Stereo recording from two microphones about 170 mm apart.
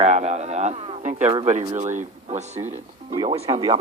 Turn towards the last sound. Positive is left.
turn(degrees=-25)  # may be behind; listen again after turning